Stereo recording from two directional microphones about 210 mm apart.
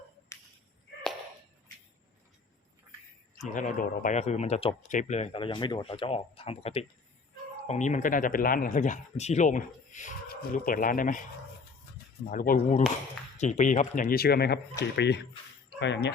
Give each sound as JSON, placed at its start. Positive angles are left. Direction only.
{"t": 0.3, "sound": "whip", "side_deg": 15}
{"t": 3.5, "sound": "speech", "side_deg": 35}
{"t": 12.3, "sound": "speech", "side_deg": 40}